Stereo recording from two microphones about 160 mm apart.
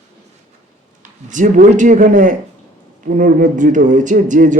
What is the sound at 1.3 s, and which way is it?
Speech, 55° right (ahead or behind).